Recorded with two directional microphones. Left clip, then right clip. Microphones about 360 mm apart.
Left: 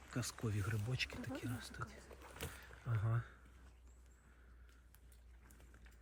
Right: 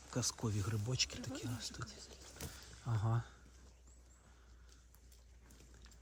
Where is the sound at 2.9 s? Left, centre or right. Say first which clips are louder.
Right 3 dB; centre.